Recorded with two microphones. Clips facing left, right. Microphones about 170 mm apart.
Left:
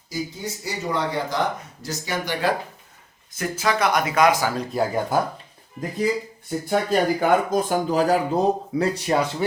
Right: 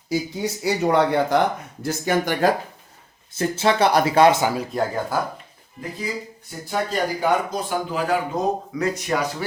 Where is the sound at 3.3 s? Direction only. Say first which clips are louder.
Right 4 dB; 30° right (ahead or behind).